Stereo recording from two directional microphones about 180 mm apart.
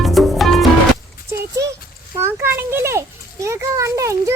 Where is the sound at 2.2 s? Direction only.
15° right (ahead or behind).